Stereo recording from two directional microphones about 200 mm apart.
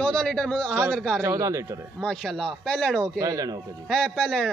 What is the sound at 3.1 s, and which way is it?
Speech, 15° right (ahead or behind).